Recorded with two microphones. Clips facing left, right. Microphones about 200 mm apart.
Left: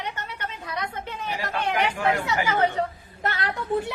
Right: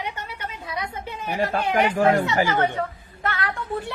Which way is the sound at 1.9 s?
35° right (ahead or behind).